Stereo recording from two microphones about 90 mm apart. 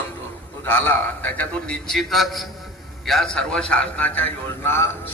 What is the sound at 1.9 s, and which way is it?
A man's voice, centre (ahead or behind).